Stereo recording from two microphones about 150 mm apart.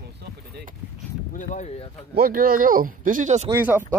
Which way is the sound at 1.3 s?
55° left (ahead or behind).